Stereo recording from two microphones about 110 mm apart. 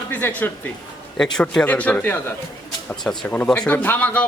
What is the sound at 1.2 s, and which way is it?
A man's voice, 5° left (ahead or behind).